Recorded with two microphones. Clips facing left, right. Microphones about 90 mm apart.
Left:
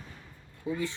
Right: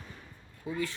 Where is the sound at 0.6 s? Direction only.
20° left (ahead or behind).